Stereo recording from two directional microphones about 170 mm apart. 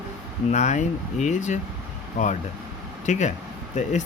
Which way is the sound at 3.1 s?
45° left (ahead or behind).